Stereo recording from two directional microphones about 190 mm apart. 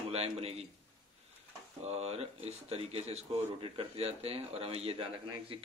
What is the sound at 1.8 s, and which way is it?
Speech, 35° right (ahead or behind).